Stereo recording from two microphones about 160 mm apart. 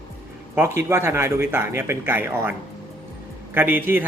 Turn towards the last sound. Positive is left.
turn(degrees=-10)  # may be behind; listen again after turning